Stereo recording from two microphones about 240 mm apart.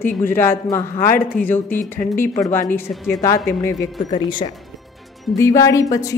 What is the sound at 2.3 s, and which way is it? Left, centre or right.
Speech, centre.